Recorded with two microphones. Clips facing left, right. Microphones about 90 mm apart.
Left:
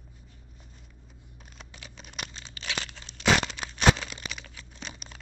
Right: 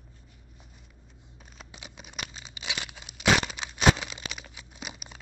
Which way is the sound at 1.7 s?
15° right (ahead or behind).